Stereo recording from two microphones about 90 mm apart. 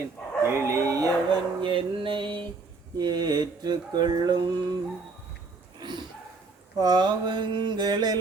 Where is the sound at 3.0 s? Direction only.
50° right (ahead or behind).